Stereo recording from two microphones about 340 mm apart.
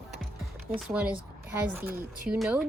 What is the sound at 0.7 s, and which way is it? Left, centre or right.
Speech, centre.